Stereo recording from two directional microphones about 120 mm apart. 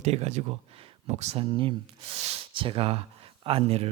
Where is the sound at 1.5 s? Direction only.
45° right (ahead or behind).